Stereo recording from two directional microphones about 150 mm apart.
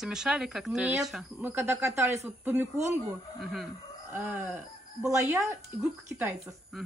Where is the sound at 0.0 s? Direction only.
5° right (ahead or behind).